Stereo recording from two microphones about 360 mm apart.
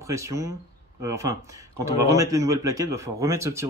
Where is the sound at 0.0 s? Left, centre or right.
Centre.